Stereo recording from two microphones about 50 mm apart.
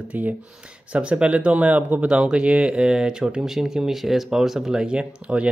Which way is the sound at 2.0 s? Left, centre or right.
Centre.